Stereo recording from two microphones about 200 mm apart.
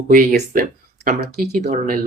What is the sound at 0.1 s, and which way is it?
Speech, 45° right (ahead or behind).